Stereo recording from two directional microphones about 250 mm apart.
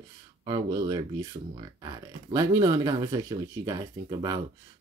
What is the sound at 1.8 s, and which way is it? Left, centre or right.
Speech, centre.